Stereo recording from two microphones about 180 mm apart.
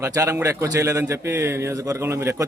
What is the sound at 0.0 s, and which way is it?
A man's voice, 15° right (ahead or behind).